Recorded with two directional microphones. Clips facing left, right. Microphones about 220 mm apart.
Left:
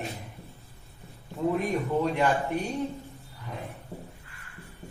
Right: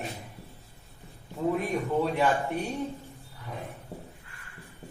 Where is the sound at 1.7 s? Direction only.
Centre (ahead or behind).